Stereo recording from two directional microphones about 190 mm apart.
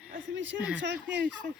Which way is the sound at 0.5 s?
5° right (ahead or behind).